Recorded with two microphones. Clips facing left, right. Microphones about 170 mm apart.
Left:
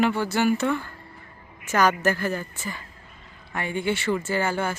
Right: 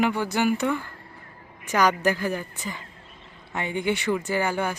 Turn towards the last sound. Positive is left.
turn(degrees=-15)  # may be behind; listen again after turning